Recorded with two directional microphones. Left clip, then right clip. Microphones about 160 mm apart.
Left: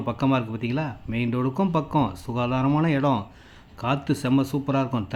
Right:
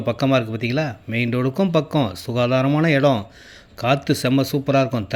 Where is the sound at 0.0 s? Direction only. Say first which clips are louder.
Right 5 dB; 15° right (ahead or behind).